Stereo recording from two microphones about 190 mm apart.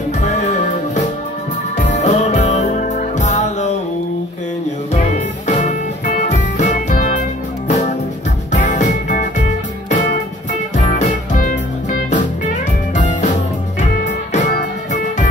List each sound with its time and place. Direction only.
0.2 s music: 40° left (ahead or behind)
4.9 s music: 35° left (ahead or behind)
10.9 s music: 45° left (ahead or behind)
12.9 s music: 40° left (ahead or behind)
14.3 s music: 40° left (ahead or behind)